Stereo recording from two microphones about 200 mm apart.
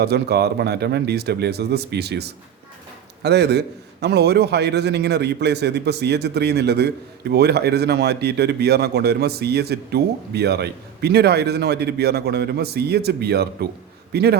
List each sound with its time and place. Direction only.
0.0 s a man's voice: 55° right (ahead or behind)